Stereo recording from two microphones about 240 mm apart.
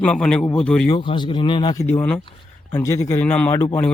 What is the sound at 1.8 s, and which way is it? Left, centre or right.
A man's voice, centre.